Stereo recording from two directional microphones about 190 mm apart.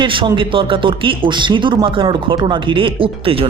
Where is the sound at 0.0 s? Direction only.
25° right (ahead or behind).